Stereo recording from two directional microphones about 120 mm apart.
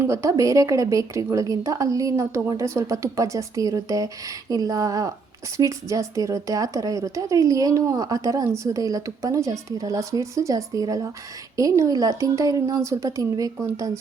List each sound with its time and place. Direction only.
0.0 s a woman's voice: 25° right (ahead or behind)